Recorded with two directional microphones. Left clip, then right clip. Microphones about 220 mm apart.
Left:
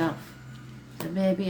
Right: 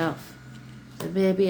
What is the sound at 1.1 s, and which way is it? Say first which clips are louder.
Speech: right 5 dB; 30° right (ahead or behind).